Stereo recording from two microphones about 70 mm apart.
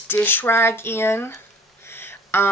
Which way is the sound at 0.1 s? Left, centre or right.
Left.